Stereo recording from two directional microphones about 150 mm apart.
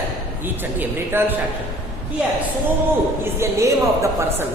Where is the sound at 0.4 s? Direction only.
15° right (ahead or behind).